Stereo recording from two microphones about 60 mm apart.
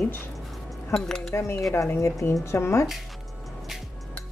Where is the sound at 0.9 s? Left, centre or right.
Left.